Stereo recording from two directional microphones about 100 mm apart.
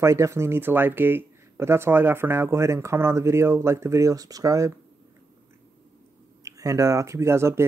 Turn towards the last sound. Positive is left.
turn(degrees=-25)  # may be behind; listen again after turning